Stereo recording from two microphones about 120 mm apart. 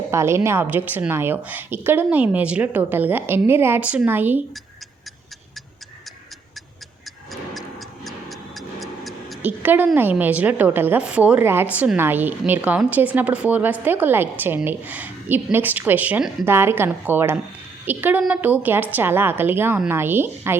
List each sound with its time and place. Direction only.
0.1 s a woman's voice: 25° right (ahead or behind)
8.0 s a sound: centre (ahead or behind)
9.4 s a woman's voice: 15° right (ahead or behind)